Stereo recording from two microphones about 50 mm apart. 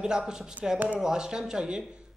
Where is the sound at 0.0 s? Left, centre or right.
Centre.